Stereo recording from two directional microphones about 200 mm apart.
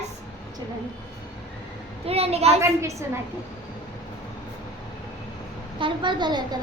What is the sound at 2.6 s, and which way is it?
Speech, 15° right (ahead or behind).